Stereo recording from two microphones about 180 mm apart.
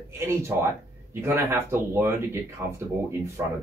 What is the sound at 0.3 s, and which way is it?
Speech, 15° right (ahead or behind).